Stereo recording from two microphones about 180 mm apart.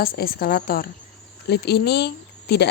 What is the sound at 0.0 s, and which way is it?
Speech, 55° left (ahead or behind).